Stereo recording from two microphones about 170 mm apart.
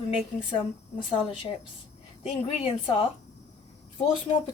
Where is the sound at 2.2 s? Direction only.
40° left (ahead or behind).